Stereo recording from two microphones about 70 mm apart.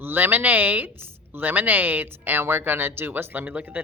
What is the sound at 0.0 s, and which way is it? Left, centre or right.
A woman's voice, right.